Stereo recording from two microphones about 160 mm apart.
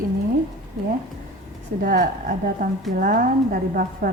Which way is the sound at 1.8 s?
55° right (ahead or behind).